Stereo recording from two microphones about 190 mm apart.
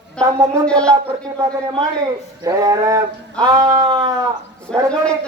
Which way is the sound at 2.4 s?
20° right (ahead or behind).